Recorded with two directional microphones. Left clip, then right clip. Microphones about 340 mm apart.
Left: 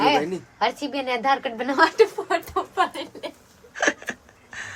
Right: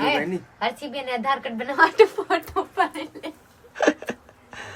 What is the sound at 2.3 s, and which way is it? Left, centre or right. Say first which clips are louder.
Speech: right 1 dB; centre.